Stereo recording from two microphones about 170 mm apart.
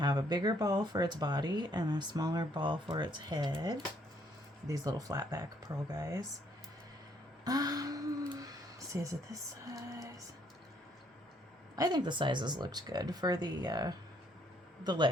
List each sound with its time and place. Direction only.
0.0 s speech: 25° right (ahead or behind)
7.4 s a sound: 20° right (ahead or behind)
11.8 s speech: 25° right (ahead or behind)